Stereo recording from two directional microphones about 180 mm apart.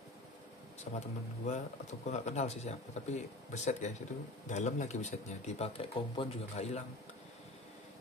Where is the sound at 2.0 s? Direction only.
40° left (ahead or behind).